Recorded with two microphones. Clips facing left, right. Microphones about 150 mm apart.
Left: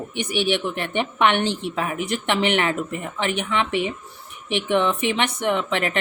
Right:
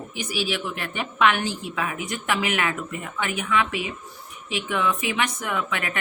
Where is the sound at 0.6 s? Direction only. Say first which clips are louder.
Left 6 dB; 25° left (ahead or behind).